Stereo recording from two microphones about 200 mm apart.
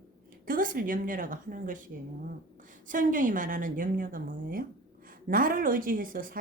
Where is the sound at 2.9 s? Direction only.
40° right (ahead or behind).